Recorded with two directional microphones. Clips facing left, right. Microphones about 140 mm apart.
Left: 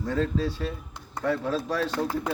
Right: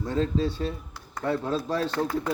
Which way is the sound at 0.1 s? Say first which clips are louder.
Right 1 dB; 25° right (ahead or behind).